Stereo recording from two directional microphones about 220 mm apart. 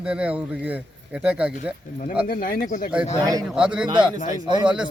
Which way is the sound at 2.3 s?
40° left (ahead or behind).